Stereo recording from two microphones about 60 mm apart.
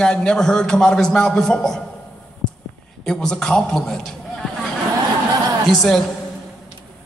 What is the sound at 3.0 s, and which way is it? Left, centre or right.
A man's voice, centre.